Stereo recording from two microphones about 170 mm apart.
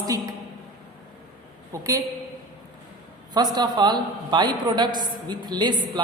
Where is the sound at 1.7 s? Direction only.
20° right (ahead or behind).